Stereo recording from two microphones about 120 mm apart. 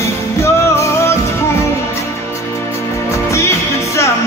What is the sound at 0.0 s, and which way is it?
Music, 25° left (ahead or behind).